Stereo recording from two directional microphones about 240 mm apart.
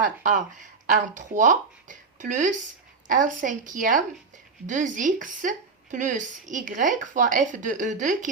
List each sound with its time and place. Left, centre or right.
0.0 s speech: right